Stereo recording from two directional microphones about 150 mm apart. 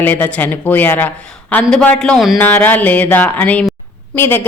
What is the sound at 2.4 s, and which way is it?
A woman's voice, 10° left (ahead or behind).